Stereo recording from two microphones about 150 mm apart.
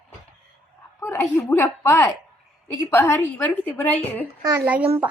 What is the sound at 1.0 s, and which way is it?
A woman's voice, 20° left (ahead or behind).